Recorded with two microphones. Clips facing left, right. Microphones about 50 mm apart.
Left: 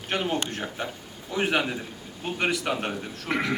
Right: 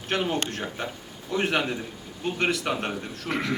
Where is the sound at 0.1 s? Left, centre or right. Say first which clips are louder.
Right 1 dB; centre.